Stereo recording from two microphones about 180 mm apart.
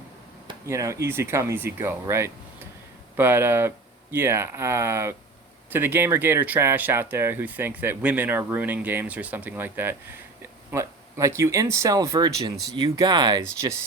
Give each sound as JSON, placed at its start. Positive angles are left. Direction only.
{"t": 0.6, "sound": "speech", "side_deg": -15}